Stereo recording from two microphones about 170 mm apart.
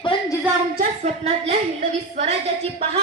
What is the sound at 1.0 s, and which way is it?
A woman's voice, 40° right (ahead or behind).